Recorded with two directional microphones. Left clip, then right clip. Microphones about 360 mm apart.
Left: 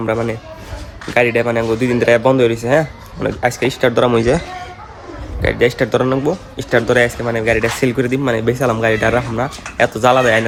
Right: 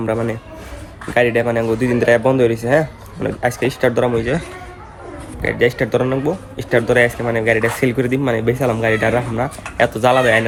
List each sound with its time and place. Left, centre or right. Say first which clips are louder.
0.0 s speech: left 2 dB; centre
4.1 s speech: left 5 dB; centre
5.4 s speech: left 2 dB; centre